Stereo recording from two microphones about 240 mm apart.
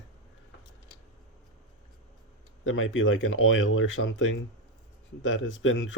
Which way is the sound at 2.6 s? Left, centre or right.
Left.